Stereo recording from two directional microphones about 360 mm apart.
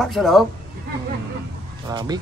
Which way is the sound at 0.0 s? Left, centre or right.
Centre.